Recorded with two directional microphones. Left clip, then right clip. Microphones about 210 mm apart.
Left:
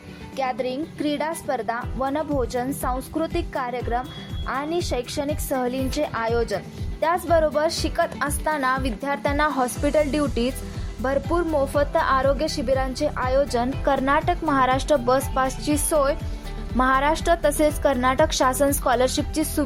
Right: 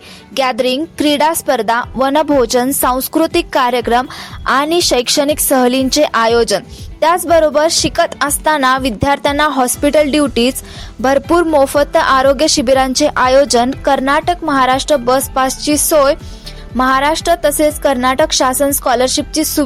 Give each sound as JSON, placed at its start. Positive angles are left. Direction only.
{"t": 0.3, "sound": "a woman's voice", "side_deg": -40}